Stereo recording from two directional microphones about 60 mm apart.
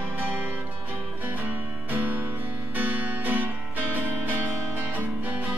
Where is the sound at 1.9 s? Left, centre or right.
Right.